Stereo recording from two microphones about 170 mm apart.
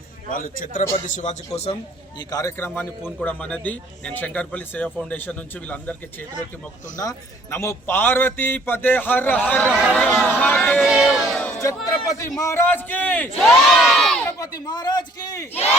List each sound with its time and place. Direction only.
0.3 s speech: 50° left (ahead or behind)
2.1 s speech: 20° left (ahead or behind)
6.9 s speech: 20° left (ahead or behind)
10.2 s a sound: 10° left (ahead or behind)
11.9 s speech: 20° left (ahead or behind); by 14.2 s centre (ahead or behind)
14.3 s a man's voice: 20° left (ahead or behind)